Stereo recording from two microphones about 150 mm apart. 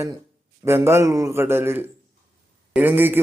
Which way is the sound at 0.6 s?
15° right (ahead or behind).